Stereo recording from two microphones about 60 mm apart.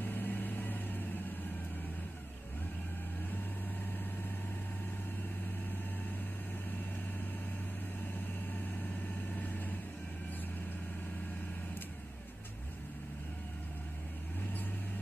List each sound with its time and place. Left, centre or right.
0.0 s vehicle: left